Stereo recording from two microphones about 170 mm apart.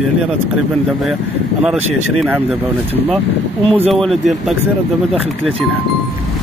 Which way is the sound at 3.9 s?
Centre (ahead or behind).